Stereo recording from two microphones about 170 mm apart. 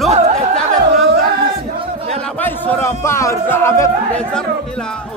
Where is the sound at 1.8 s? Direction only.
35° right (ahead or behind).